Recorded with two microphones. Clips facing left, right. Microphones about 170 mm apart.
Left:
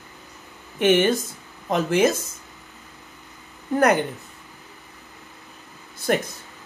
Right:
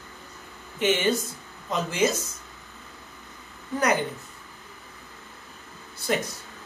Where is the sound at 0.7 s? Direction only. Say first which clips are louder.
Left 5 dB; 55° left (ahead or behind).